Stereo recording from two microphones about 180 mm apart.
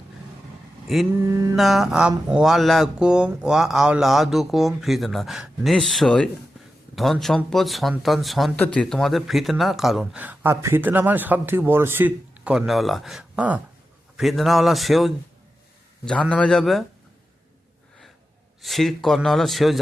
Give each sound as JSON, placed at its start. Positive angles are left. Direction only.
{"t": 1.2, "sound": "mantra", "side_deg": -15}
{"t": 1.5, "sound": "speech", "side_deg": 0}
{"t": 16.3, "sound": "speech", "side_deg": 5}
{"t": 18.6, "sound": "speech", "side_deg": 0}